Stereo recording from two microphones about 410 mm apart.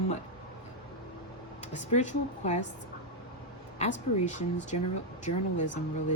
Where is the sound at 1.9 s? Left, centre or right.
Centre.